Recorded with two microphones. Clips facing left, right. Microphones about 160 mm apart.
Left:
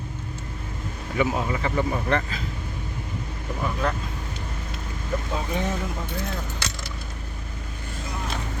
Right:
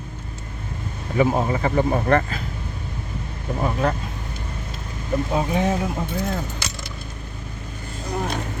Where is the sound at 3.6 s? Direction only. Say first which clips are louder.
Right 4 dB; 35° right (ahead or behind).